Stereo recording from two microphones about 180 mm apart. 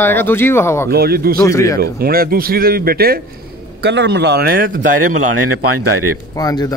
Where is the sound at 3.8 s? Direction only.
70° right (ahead or behind); by 4.8 s 55° right (ahead or behind).